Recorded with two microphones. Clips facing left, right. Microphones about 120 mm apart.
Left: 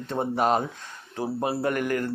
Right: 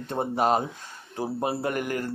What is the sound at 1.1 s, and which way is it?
Speech, 20° right (ahead or behind).